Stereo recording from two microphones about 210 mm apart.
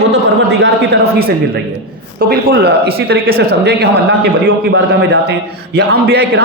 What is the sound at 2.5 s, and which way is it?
A man's voice, 50° right (ahead or behind).